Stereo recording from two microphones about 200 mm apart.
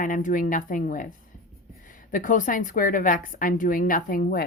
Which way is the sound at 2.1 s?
40° left (ahead or behind).